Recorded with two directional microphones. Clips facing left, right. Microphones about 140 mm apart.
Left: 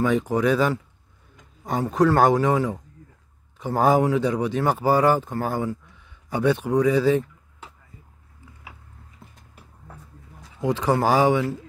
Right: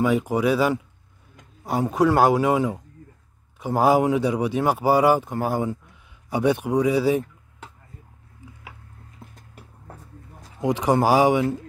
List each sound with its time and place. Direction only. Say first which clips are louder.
0.0 s speech: even; 10° right (ahead or behind)
10.6 s speech: right 1 dB; 15° right (ahead or behind)